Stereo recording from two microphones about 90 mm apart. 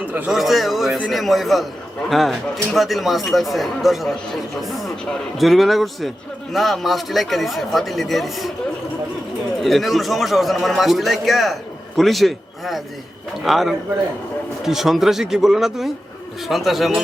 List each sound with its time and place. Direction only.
0.0 s a sound: 20° right (ahead or behind)
0.3 s a man's voice: centre (ahead or behind)
9.6 s a man's voice: centre (ahead or behind)